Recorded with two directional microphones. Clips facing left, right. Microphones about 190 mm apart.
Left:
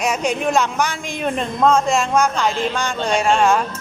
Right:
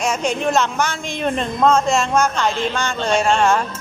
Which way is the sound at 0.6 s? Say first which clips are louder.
Even; 15° left (ahead or behind).